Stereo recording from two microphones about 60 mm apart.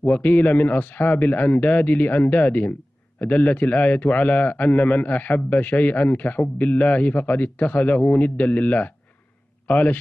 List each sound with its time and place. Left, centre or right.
0.0 s a man's voice: left